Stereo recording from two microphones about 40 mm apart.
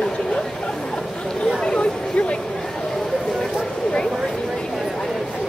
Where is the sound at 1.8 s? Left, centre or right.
Left.